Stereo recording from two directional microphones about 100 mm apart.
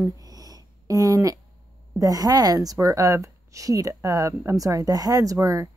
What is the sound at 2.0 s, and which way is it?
A woman's voice, 40° right (ahead or behind).